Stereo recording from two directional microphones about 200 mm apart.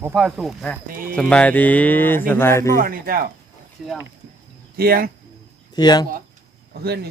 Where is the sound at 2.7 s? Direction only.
45° right (ahead or behind).